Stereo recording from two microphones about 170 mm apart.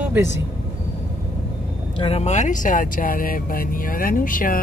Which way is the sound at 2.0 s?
40° left (ahead or behind).